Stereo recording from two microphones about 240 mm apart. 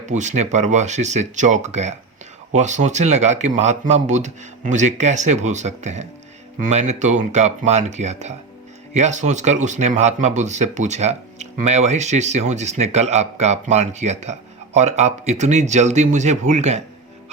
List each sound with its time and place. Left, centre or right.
0.0 s speech: right